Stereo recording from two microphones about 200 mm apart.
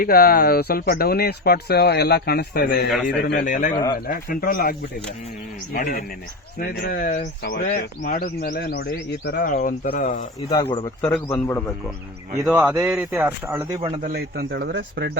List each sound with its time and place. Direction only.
0.0 s speech: 45° left (ahead or behind)
3.7 s speech: 20° left (ahead or behind)
4.0 s speech: 45° left (ahead or behind)
10.5 s speech: 20° left (ahead or behind)
11.0 s a man's voice: 5° left (ahead or behind)
12.5 s speech: 10° right (ahead or behind)
13.8 s speech: 35° right (ahead or behind); by 15.2 s 55° right (ahead or behind)